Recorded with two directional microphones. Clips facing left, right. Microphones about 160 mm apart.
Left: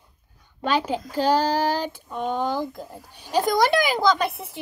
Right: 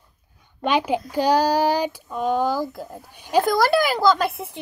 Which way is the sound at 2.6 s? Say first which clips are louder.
Right 2 dB; 5° right (ahead or behind).